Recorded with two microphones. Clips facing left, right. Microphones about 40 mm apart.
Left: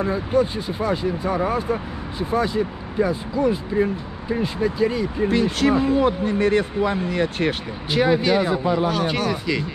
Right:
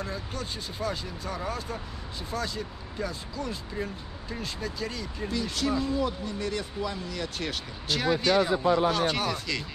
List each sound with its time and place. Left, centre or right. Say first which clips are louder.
0.0 s speech: left 15 dB; left
5.3 s speech: left 9 dB; left
7.9 s speech: left 6 dB; left